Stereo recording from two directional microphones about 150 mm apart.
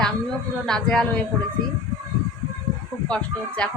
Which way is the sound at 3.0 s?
5° left (ahead or behind).